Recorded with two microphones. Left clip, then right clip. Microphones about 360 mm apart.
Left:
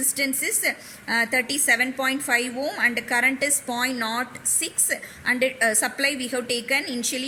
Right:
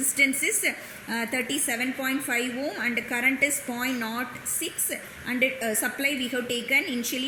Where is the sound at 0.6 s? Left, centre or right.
Left.